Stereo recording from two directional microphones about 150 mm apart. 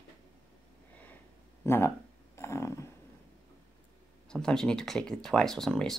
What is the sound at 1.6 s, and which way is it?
Speech, 15° left (ahead or behind).